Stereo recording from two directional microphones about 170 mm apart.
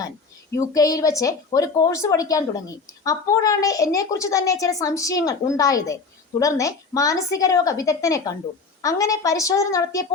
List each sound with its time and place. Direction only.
0.5 s a woman's voice: 20° left (ahead or behind)